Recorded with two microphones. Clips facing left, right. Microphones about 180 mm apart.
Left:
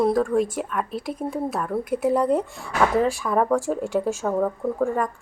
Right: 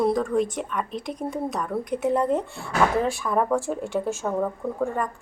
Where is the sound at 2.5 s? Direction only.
40° left (ahead or behind).